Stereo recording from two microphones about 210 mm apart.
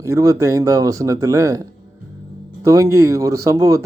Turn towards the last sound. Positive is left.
turn(degrees=-15)  # may be behind; listen again after turning